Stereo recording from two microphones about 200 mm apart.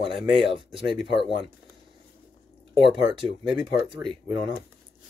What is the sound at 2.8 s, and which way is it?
Speech, 25° right (ahead or behind).